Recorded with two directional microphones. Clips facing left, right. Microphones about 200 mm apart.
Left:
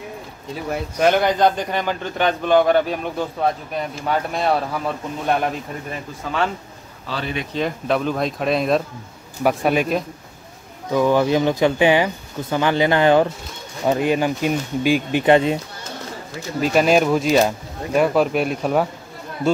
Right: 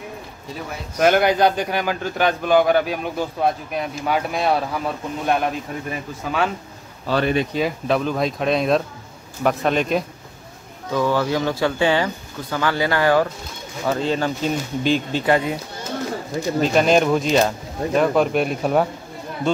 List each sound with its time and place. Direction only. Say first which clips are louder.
0.9 s a man's voice: right 1 dB; 5° right (ahead or behind)
7.1 s speech: right 7 dB; 55° right (ahead or behind)
7.5 s a man's voice: right 1 dB; centre (ahead or behind)
15.2 s speech: left 5 dB; 25° left (ahead or behind)
16.6 s a man's voice: left 1 dB; 5° left (ahead or behind)